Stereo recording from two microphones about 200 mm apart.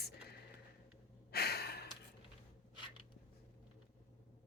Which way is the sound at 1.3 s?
55° left (ahead or behind).